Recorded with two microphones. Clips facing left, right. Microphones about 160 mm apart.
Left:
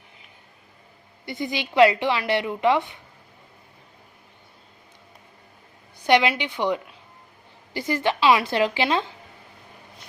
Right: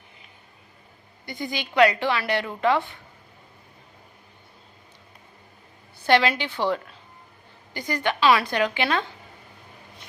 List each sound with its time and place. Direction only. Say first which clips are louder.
1.2 s a woman's voice: left 3 dB; 25° left (ahead or behind)
6.1 s a woman's voice: left 1 dB; 20° left (ahead or behind)
7.7 s a woman's voice: left 3 dB; 25° left (ahead or behind)